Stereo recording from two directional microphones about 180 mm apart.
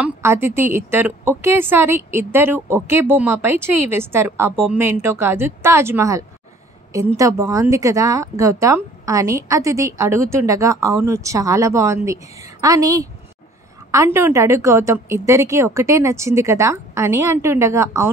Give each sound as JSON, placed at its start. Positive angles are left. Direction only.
{"t": 0.0, "sound": "speech", "side_deg": -15}